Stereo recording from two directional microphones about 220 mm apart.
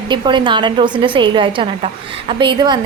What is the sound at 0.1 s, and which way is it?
A woman's voice, 20° right (ahead or behind).